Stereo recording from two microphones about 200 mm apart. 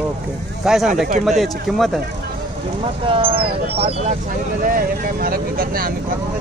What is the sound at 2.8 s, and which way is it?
Speech, 25° right (ahead or behind).